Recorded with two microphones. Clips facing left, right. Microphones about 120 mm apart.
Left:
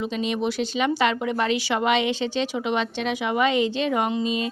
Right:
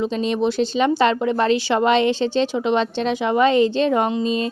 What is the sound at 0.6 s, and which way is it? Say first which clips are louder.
Speech: right 5 dB; 30° right (ahead or behind).